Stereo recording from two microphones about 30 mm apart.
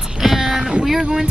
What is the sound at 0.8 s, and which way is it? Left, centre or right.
Speech, centre.